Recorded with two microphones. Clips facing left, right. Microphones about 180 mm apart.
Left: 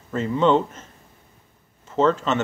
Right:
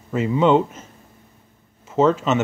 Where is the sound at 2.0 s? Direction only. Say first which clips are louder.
Right 3 dB; 10° right (ahead or behind).